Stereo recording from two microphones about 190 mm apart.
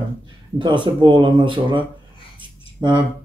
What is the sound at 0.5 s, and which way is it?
Speech, 25° right (ahead or behind).